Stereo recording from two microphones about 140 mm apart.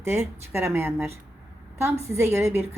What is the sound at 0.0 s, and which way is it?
A woman's voice, 20° right (ahead or behind).